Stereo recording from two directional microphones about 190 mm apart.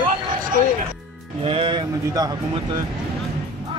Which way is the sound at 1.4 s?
30° right (ahead or behind).